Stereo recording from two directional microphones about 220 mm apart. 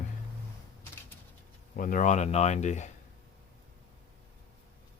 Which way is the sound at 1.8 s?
35° left (ahead or behind).